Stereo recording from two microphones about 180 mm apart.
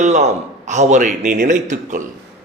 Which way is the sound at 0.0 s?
40° right (ahead or behind).